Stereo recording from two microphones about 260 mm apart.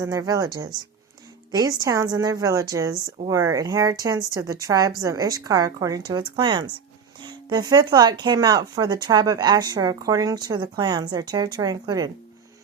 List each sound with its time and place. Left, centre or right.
0.0 s speech: centre